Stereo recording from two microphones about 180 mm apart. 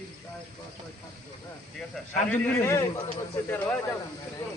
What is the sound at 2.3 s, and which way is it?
Speech, 15° left (ahead or behind).